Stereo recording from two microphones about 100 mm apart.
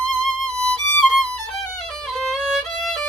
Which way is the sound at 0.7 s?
10° left (ahead or behind).